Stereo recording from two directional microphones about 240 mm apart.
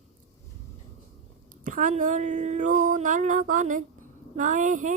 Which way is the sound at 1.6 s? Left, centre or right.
Right.